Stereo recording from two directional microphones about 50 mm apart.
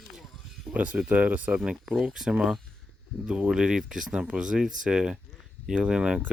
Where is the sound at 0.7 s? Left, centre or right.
Right.